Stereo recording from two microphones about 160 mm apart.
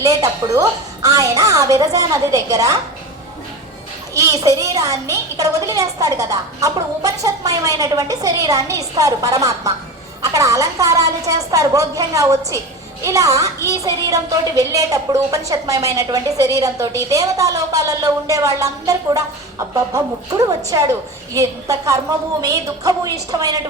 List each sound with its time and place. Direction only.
0.0 s a child's voice: 20° right (ahead or behind)
4.1 s a child's voice: 20° right (ahead or behind)